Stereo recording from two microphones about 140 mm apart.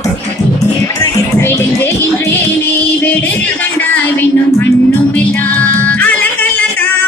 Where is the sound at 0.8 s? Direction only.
15° left (ahead or behind).